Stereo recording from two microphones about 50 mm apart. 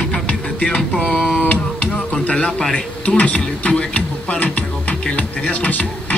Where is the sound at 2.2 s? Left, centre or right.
Left.